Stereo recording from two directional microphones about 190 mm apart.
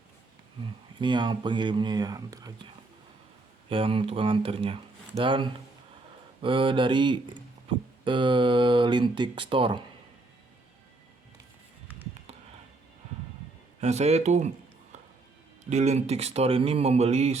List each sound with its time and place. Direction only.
0.9 s speech: 25° right (ahead or behind)
3.7 s speech: 30° right (ahead or behind)
13.8 s speech: 35° right (ahead or behind)
15.7 s speech: 35° right (ahead or behind)